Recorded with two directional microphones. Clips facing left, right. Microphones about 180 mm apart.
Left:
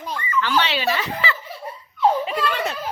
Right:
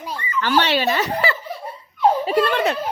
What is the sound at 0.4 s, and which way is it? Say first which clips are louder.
Speech: right 5 dB; 45° right (ahead or behind).